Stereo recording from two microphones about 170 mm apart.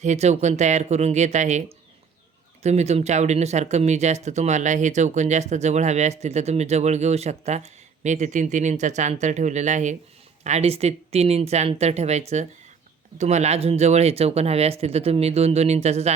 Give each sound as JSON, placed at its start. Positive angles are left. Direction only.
{"t": 0.0, "sound": "speech", "side_deg": -40}
{"t": 2.6, "sound": "speech", "side_deg": -40}